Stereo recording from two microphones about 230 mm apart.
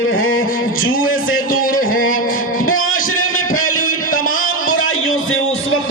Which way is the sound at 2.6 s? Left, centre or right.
Left.